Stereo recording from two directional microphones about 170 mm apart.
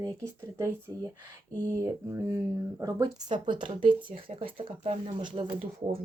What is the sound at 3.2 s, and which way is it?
Speech, 25° right (ahead or behind).